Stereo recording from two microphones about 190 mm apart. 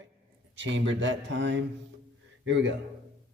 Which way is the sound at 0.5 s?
75° right (ahead or behind).